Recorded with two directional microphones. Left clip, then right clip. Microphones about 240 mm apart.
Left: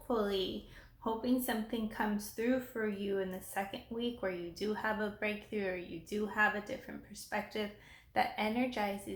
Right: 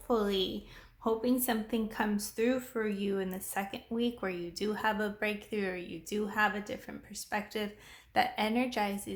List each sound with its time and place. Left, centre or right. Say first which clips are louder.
0.1 s speech: right 4 dB; right